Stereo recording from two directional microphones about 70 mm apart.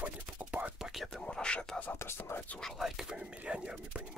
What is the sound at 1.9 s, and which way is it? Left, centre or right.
Whispering, left.